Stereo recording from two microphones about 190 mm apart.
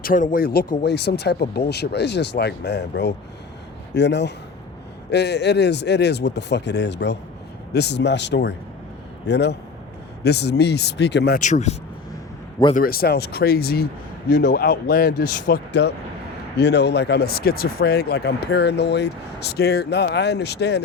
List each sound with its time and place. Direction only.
0.0 s speech: 45° left (ahead or behind); by 11.3 s 65° left (ahead or behind)
11.3 s speech: 40° left (ahead or behind)
12.7 s speech: 50° left (ahead or behind)